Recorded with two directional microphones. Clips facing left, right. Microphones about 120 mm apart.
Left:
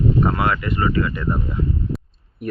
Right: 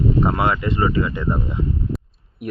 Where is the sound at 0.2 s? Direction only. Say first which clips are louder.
Right 1 dB; 20° right (ahead or behind).